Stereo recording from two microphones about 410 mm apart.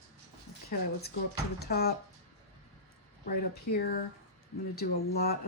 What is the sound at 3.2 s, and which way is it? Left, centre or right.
Speech, left.